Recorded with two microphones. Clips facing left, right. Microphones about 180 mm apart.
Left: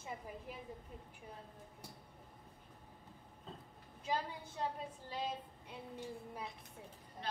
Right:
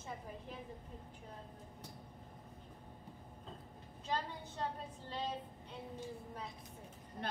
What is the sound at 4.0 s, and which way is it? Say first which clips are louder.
Speech: left 1 dB; 10° left (ahead or behind).